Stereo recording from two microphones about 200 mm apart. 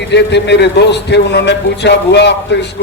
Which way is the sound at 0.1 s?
60° left (ahead or behind).